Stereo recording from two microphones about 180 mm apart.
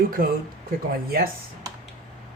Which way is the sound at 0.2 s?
50° right (ahead or behind).